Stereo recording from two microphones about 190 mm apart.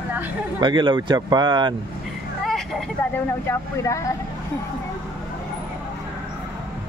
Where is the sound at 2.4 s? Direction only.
5° left (ahead or behind).